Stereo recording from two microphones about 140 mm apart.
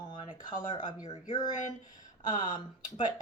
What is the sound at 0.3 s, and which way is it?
Speech, 35° left (ahead or behind).